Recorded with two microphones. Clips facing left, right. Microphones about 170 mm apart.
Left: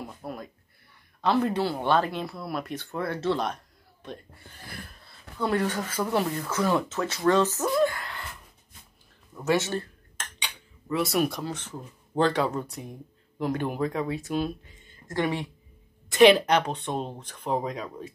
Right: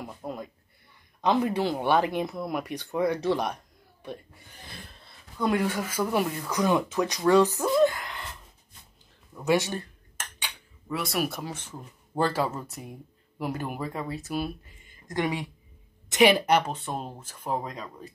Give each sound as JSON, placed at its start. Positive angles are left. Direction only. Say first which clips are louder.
{"t": 0.2, "sound": "a sound", "louder": "right 3 dB", "side_deg": -15}
{"t": 1.2, "sound": "speech", "louder": "even", "side_deg": -15}
{"t": 5.4, "sound": "speech", "louder": "right 1 dB", "side_deg": -15}
{"t": 7.7, "sound": "a sound", "louder": "right 2 dB", "side_deg": -20}
{"t": 9.4, "sound": "cutlery", "louder": "even", "side_deg": -15}
{"t": 11.0, "sound": "speech", "louder": "left 4 dB", "side_deg": 0}
{"t": 15.0, "sound": "speech", "louder": "left 1 dB", "side_deg": -15}